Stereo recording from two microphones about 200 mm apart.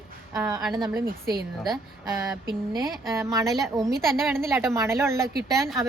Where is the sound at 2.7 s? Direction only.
15° right (ahead or behind).